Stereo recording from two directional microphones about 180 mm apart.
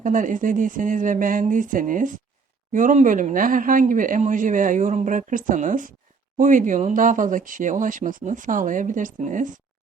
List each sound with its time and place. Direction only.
0.0 s speech: 45° right (ahead or behind)